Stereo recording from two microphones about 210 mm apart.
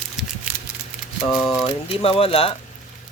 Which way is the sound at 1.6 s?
25° left (ahead or behind).